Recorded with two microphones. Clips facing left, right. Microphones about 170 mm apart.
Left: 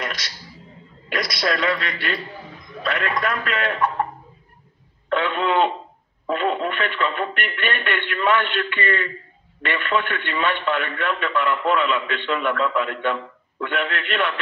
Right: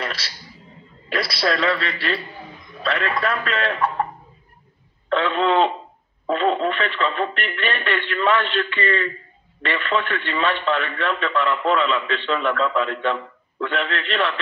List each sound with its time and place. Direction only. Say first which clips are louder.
0.0 s a sound: right 1 dB; 30° right (ahead or behind)
1.0 s a man's voice: right 1 dB; 30° right (ahead or behind)
5.1 s a man's voice: right 2 dB; 30° right (ahead or behind)